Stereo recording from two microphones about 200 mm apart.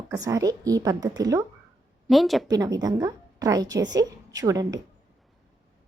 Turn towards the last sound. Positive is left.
turn(degrees=-20)  # may be behind; listen again after turning